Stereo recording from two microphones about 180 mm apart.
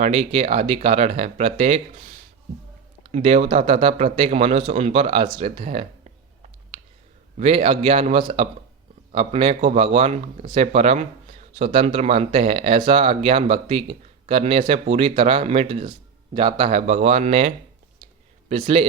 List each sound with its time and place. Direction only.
0.0 s speech: 35° right (ahead or behind)
3.1 s speech: 40° right (ahead or behind)
7.3 s speech: 30° right (ahead or behind)